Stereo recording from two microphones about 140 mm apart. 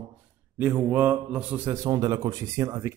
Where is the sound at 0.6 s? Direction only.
15° right (ahead or behind).